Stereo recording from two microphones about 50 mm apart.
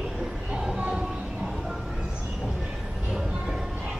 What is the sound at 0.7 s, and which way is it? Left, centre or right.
Train, right.